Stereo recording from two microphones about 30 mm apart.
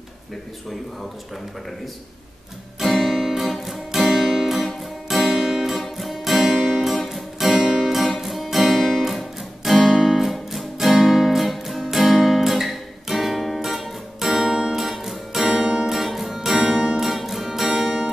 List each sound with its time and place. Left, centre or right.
2.8 s guitar: centre
3.3 s music: centre
7.5 s music: centre
7.8 s music: centre
8.2 s guitar: centre
11.1 s music: centre
11.8 s guitar: centre
14.3 s guitar: centre
15.0 s music: centre
16.0 s music: centre
17.0 s music: centre